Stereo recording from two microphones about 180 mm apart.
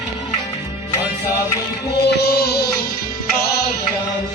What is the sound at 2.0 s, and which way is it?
Music, 60° left (ahead or behind).